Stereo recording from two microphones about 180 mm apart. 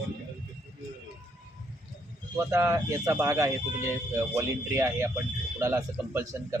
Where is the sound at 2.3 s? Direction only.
15° right (ahead or behind).